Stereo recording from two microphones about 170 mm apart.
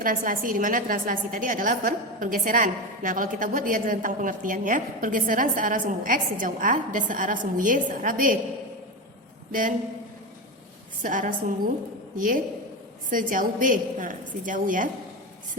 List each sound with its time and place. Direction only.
0.0 s a woman's voice: 55° right (ahead or behind)
9.5 s a woman's voice: 55° right (ahead or behind)
11.0 s a woman's voice: 50° right (ahead or behind)